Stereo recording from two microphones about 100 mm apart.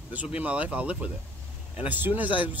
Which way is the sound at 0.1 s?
15° right (ahead or behind).